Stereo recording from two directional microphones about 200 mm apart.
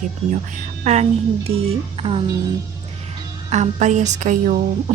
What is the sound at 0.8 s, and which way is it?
Speech, 35° right (ahead or behind).